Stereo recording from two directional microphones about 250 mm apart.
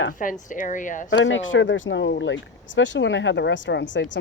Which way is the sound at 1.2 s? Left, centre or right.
Left.